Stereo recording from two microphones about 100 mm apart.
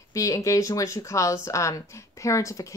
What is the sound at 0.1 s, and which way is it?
Speech, 30° left (ahead or behind).